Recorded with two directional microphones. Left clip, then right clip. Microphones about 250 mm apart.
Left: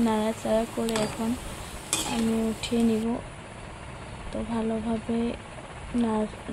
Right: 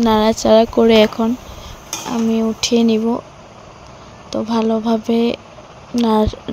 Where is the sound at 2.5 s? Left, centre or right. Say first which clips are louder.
Right 11 dB; right.